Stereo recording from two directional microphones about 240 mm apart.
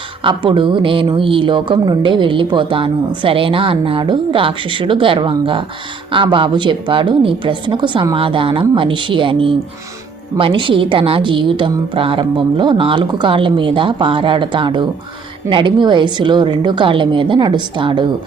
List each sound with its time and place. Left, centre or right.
0.2 s a woman's voice: right